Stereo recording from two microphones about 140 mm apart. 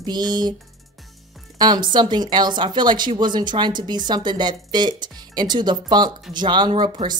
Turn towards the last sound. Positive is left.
turn(degrees=-35)  # may be behind; listen again after turning